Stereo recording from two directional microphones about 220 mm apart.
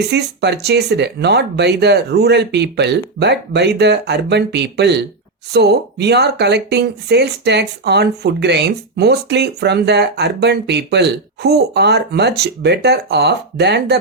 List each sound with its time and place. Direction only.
0.1 s speech: 50° right (ahead or behind)